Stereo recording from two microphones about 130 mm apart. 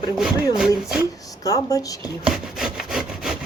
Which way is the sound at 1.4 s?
25° left (ahead or behind).